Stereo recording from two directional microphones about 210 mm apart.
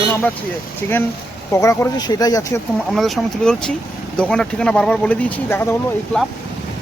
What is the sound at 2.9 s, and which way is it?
Speech, centre (ahead or behind).